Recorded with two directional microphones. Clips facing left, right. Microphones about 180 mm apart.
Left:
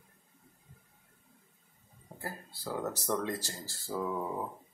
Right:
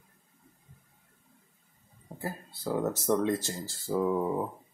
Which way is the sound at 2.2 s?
20° right (ahead or behind).